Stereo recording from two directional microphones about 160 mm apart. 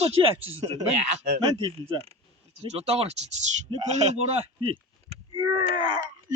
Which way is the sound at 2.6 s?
40° right (ahead or behind).